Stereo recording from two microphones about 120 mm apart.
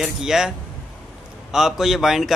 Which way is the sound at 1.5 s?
5° right (ahead or behind).